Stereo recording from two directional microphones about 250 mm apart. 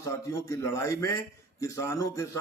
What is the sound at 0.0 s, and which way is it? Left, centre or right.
A man's voice, centre.